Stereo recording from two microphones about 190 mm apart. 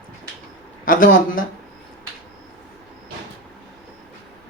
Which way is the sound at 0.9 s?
45° left (ahead or behind).